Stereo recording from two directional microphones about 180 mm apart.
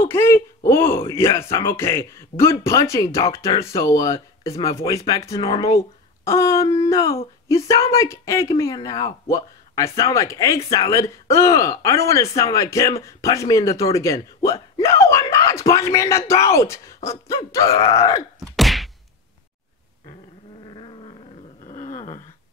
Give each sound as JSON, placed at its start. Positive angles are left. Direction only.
{"t": 0.0, "sound": "speech", "side_deg": 15}
{"t": 17.5, "sound": "groan", "side_deg": 20}
{"t": 18.6, "sound": "whack", "side_deg": 0}
{"t": 20.6, "sound": "roar", "side_deg": 25}
{"t": 21.6, "sound": "a sound", "side_deg": 25}